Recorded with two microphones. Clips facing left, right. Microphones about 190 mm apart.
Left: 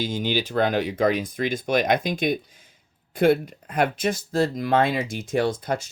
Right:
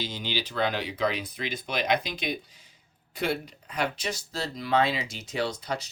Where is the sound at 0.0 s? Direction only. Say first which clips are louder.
Left 8 dB; 50° left (ahead or behind).